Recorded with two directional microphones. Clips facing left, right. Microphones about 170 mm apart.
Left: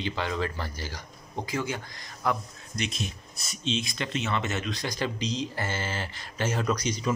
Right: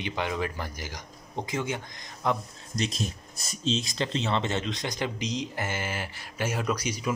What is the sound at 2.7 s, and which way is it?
Speech, 35° right (ahead or behind).